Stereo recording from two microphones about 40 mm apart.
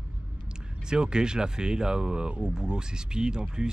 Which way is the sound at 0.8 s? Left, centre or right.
Centre.